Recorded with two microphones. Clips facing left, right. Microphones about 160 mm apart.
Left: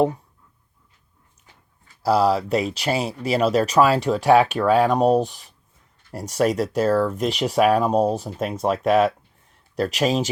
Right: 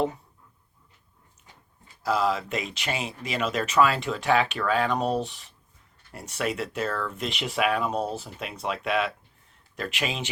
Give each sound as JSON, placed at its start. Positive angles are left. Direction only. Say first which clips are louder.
{"t": 2.0, "sound": "speech", "louder": "left 7 dB", "side_deg": 40}